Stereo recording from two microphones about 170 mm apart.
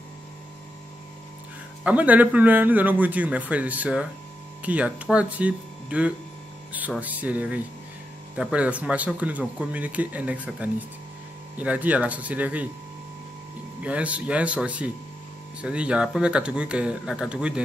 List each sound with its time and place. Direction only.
1.9 s speech: 10° right (ahead or behind)
13.8 s speech: 10° right (ahead or behind)